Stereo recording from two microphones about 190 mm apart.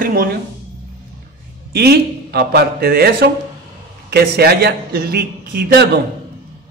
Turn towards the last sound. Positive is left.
turn(degrees=-55)  # may be behind; listen again after turning